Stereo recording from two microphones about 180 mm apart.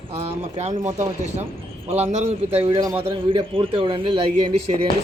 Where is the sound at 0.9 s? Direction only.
40° right (ahead or behind).